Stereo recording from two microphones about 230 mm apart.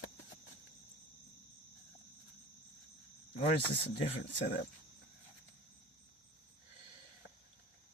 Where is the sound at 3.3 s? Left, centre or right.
Left.